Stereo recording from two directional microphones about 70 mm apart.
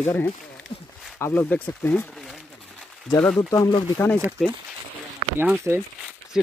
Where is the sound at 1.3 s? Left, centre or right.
Left.